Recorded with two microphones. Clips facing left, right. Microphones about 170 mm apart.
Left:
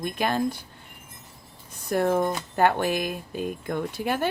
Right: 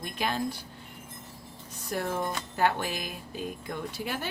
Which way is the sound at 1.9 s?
55° left (ahead or behind).